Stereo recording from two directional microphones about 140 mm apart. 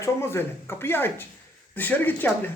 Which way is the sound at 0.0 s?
20° left (ahead or behind).